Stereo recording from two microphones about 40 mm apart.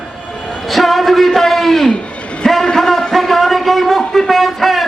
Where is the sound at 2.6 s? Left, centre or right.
Centre.